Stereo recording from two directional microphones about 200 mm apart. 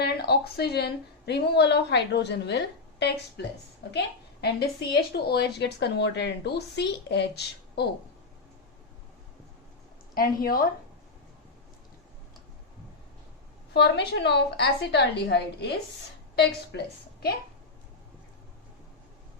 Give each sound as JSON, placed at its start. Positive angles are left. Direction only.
{"t": 0.0, "sound": "a woman's voice", "side_deg": 50}
{"t": 10.2, "sound": "speech", "side_deg": 45}
{"t": 13.7, "sound": "a woman's voice", "side_deg": 55}
{"t": 16.7, "sound": "a woman's voice", "side_deg": 60}